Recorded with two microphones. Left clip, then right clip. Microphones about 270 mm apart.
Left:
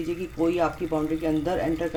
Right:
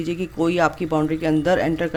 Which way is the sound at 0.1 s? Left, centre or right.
Right.